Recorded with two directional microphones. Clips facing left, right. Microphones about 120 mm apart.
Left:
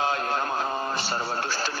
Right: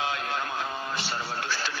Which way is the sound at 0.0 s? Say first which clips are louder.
Left 4 dB; 40° left (ahead or behind).